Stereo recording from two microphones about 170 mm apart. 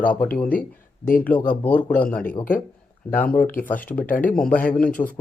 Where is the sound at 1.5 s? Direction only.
10° left (ahead or behind).